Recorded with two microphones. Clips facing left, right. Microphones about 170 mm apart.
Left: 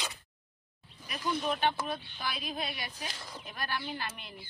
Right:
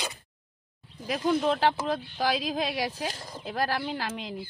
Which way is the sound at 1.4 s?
90° right.